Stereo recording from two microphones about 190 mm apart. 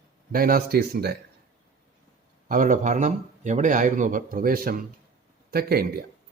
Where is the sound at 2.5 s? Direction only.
45° right (ahead or behind).